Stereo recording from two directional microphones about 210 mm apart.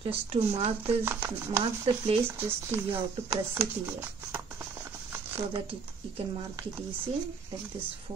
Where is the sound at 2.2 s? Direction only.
10° right (ahead or behind).